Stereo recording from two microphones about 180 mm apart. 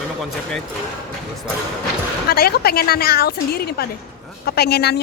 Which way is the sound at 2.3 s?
60° left (ahead or behind).